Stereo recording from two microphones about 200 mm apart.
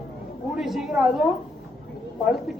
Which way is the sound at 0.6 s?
Centre (ahead or behind).